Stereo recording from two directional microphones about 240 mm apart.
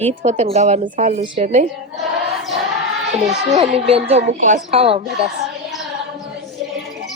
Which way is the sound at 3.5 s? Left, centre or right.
Right.